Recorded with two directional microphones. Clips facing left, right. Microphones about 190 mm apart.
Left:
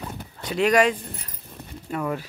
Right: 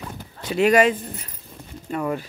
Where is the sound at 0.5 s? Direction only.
5° right (ahead or behind).